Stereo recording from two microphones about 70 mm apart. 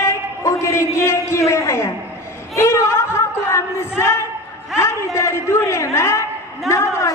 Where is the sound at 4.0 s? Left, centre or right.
Left.